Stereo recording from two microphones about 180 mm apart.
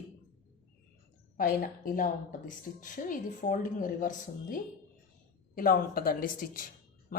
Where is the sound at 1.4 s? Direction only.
50° left (ahead or behind).